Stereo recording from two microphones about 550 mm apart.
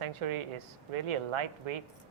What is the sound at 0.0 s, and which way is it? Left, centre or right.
Speech, right.